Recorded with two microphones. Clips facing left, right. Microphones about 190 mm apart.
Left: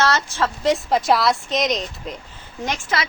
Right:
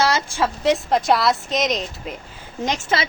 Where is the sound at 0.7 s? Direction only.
Centre (ahead or behind).